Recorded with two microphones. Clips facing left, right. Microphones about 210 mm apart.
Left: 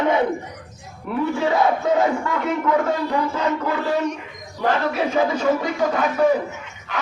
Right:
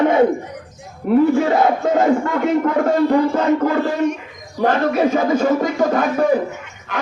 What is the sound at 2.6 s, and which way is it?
A man's voice, 50° right (ahead or behind).